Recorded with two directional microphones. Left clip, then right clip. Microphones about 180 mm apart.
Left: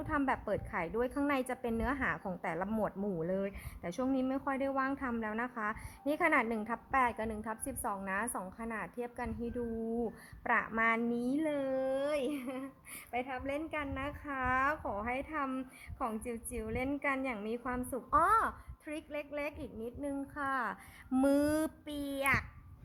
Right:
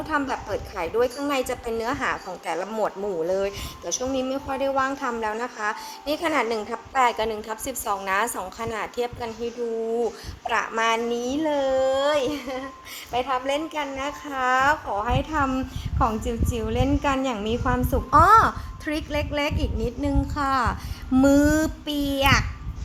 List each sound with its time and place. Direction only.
0.1 s a woman's voice: 25° left (ahead or behind); by 9.5 s 10° left (ahead or behind)
10.5 s a woman's voice: 25° left (ahead or behind)
11.3 s a woman's voice: 35° left (ahead or behind)
13.1 s a woman's voice: 10° left (ahead or behind)
18.9 s a woman's voice: 5° left (ahead or behind); by 22.4 s 25° left (ahead or behind)